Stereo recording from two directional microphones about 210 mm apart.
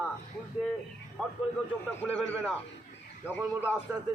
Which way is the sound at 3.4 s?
10° right (ahead or behind).